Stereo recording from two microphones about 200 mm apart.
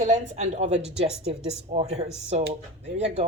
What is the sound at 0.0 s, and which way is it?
Speech, 35° right (ahead or behind).